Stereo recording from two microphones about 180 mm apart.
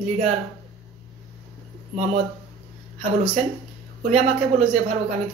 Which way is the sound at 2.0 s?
40° right (ahead or behind).